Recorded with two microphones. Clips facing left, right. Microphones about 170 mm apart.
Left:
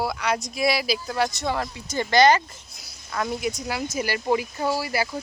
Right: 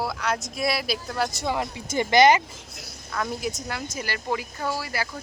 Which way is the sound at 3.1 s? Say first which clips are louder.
Left 2 dB; 5° left (ahead or behind).